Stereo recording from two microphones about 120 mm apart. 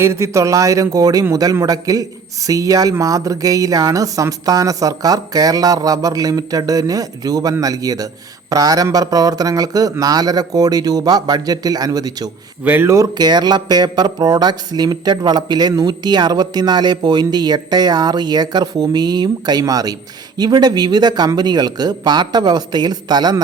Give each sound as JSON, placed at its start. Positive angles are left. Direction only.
{"t": 0.0, "sound": "speech", "side_deg": -25}
{"t": 12.6, "sound": "speech", "side_deg": -15}